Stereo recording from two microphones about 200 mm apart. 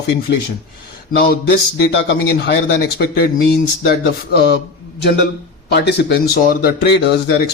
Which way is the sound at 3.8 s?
50° left (ahead or behind).